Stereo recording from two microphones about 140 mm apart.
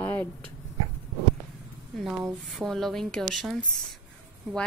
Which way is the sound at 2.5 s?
Centre (ahead or behind).